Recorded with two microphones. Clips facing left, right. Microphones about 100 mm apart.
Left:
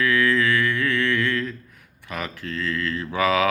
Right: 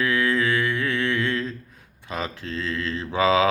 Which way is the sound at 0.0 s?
20° right (ahead or behind).